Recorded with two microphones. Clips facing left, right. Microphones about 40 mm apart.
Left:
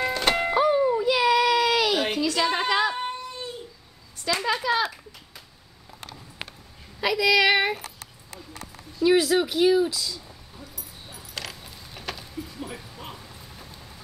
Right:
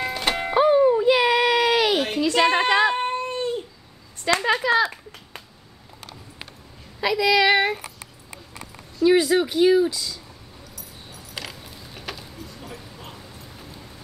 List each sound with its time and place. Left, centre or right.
0.0 s music: centre
0.6 s music: centre
1.0 s baby cry: right
2.1 s a sound: right
4.3 s speech: right
7.0 s speech: centre
9.0 s speech: centre
11.3 s mechanisms: centre
12.4 s a sound: centre